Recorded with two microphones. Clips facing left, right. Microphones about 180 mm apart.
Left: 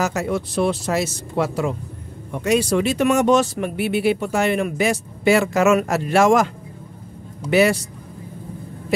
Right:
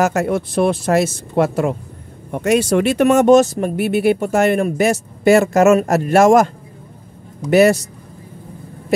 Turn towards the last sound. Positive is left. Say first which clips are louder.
# right 5 dB
turn(degrees=-45)  # may be behind; listen again after turning